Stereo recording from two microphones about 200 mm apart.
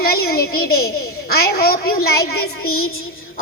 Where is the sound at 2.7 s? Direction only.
90° left.